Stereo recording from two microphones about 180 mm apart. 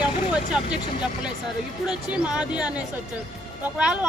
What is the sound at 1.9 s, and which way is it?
Speech, 5° right (ahead or behind).